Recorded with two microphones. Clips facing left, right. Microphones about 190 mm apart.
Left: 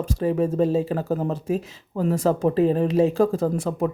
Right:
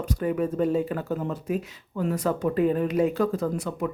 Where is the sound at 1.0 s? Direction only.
40° left (ahead or behind).